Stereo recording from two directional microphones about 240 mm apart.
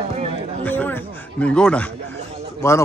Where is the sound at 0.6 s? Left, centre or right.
Centre.